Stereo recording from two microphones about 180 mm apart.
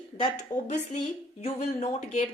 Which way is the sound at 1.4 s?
35° left (ahead or behind).